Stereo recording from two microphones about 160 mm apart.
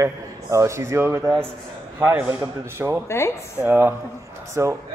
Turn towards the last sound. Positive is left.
turn(degrees=-20)  # may be behind; listen again after turning